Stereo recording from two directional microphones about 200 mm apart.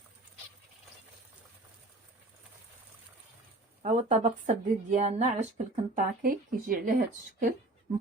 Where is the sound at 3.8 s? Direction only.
35° right (ahead or behind).